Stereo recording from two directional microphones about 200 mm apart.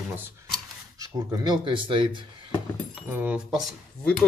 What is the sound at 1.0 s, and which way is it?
Speech, 20° right (ahead or behind).